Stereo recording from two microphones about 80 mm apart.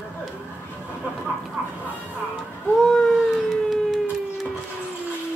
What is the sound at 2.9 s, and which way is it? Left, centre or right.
Howl, centre.